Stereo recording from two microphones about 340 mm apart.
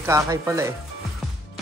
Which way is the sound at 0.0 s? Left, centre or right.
Centre.